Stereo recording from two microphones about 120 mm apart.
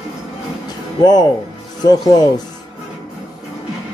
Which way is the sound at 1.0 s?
35° left (ahead or behind).